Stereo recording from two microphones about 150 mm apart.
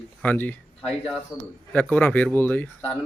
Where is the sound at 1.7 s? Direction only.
10° left (ahead or behind).